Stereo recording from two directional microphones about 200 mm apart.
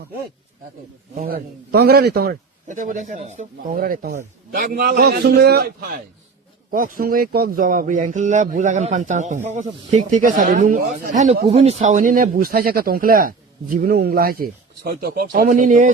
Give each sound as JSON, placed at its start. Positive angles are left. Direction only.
{"t": 1.1, "sound": "speech", "side_deg": -45}